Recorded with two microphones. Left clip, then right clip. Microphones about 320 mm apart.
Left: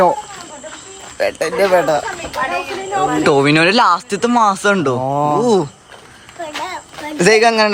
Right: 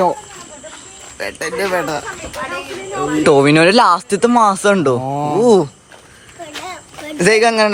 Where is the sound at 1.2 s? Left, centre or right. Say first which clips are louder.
Left 5 dB; left.